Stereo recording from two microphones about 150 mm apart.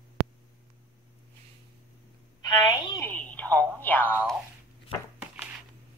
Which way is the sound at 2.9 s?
10° left (ahead or behind).